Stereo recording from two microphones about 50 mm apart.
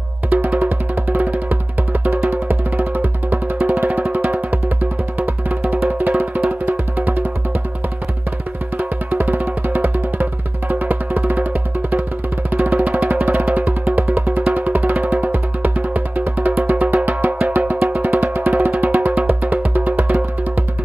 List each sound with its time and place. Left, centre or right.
0.5 s music: right
9.1 s music: right
12.4 s music: right